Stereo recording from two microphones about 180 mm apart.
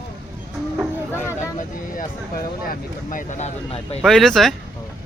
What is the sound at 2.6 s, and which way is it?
Vehicle, 50° left (ahead or behind).